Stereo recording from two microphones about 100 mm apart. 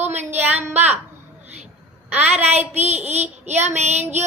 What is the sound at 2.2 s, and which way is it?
Child singing, 90° right.